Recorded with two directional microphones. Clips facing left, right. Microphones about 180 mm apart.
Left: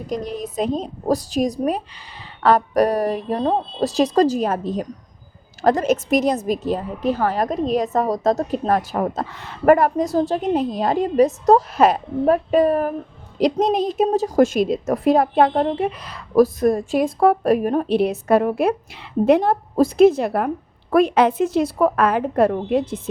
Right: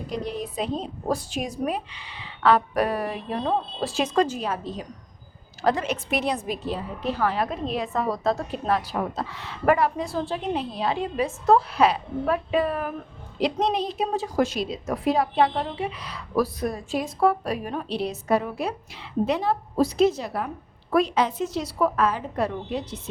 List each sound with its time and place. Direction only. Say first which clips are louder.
0.1 s a woman's voice: left 4 dB; 45° left (ahead or behind)